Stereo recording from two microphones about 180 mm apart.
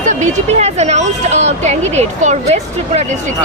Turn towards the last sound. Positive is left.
turn(degrees=-35)  # may be behind; listen again after turning